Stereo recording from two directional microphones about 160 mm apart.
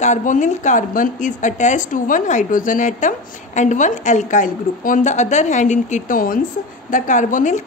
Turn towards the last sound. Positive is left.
turn(degrees=50)  # may be behind; listen again after turning